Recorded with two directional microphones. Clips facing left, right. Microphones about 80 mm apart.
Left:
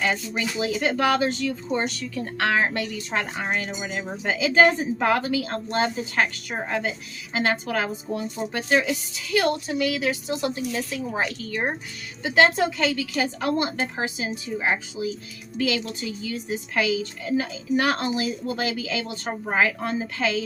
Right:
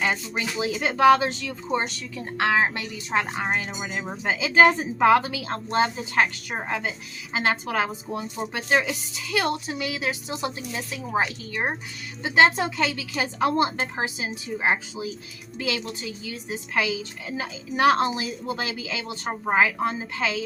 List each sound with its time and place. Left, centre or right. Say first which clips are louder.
0.0 s a woman's voice: left 1 dB; right